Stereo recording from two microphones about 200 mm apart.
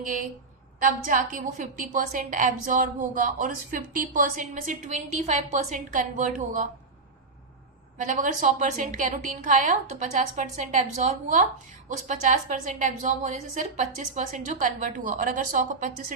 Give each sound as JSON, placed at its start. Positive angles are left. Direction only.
{"t": 0.0, "sound": "a woman's voice", "side_deg": -40}
{"t": 7.9, "sound": "a woman's voice", "side_deg": -40}